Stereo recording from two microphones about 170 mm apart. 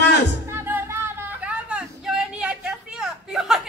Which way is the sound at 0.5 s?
15° right (ahead or behind).